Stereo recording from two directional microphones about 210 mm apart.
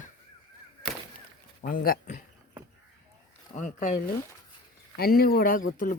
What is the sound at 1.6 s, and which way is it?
Speech, 45° left (ahead or behind).